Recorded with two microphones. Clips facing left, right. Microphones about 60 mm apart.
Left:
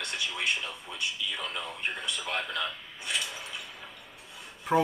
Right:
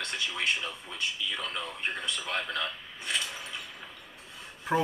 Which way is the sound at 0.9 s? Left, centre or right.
Right.